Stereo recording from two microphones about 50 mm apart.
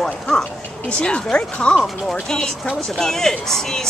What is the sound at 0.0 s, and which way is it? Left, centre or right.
Speech, centre.